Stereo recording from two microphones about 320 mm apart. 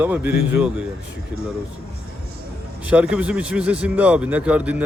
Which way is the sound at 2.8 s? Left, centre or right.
Centre.